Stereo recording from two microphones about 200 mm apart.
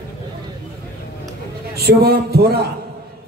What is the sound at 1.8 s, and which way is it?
Speech, 50° right (ahead or behind).